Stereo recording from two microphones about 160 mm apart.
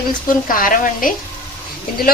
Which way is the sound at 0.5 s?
60° left (ahead or behind).